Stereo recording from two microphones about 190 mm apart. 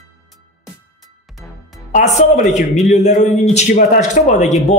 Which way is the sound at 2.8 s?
35° left (ahead or behind).